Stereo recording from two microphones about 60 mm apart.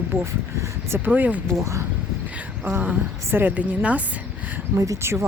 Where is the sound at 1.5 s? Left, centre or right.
Right.